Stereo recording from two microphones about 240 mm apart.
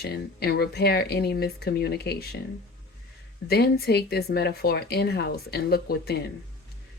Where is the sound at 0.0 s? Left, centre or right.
Left.